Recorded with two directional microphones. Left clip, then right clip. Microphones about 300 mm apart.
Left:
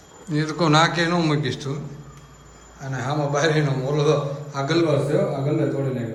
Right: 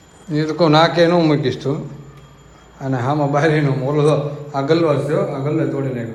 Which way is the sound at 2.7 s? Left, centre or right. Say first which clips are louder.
Right 7 dB; centre.